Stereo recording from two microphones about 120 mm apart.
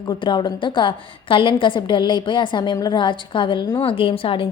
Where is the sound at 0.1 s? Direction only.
40° left (ahead or behind).